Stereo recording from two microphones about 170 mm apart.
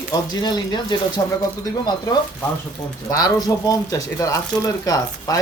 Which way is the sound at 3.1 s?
20° left (ahead or behind).